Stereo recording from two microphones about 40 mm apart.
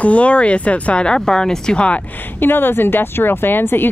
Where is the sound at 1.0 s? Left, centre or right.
Centre.